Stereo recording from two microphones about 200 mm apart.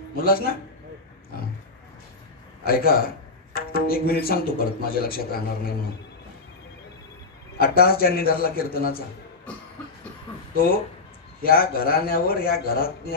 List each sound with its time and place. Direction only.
0.1 s speech: 50° left (ahead or behind)
2.6 s speech: 50° left (ahead or behind)
7.5 s speech: 45° left (ahead or behind)
11.4 s speech: 50° left (ahead or behind)